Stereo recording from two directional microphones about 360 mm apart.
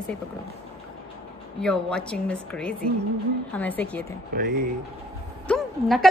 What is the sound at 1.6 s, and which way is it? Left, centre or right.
A woman's voice, centre.